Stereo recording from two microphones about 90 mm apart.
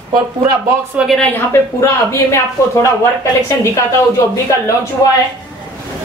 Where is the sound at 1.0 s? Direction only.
15° right (ahead or behind).